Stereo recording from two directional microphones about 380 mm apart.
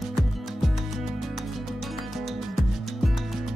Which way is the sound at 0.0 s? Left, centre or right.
Centre.